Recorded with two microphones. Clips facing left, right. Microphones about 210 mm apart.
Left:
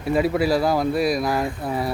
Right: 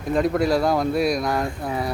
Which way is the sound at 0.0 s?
5° left (ahead or behind).